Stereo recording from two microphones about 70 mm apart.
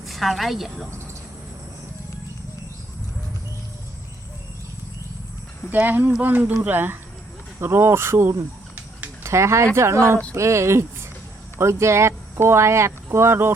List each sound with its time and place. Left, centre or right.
0.0 s a woman's voice: centre
5.7 s speech: right